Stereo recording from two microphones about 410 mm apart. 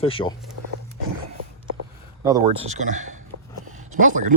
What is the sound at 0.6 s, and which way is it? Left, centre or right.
Wild animals, right.